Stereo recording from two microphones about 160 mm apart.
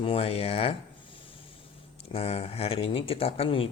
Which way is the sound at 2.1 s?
40° left (ahead or behind).